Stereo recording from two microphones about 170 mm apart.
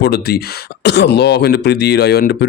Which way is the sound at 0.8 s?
90° left.